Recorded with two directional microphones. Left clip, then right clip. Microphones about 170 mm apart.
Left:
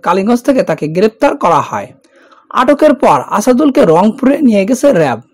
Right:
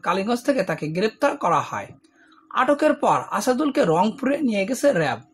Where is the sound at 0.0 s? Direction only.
45° left (ahead or behind).